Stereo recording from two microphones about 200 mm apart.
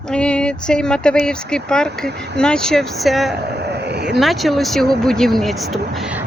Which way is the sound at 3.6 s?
55° right (ahead or behind).